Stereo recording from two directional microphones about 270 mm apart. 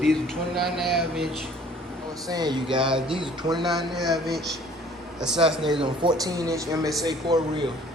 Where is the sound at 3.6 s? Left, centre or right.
Centre.